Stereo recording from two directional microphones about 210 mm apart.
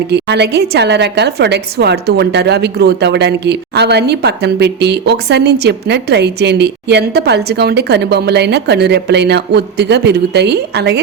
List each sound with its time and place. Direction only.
0.1 s a woman's voice: 50° right (ahead or behind)